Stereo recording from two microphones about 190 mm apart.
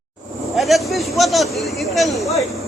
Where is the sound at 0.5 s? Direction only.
Centre (ahead or behind).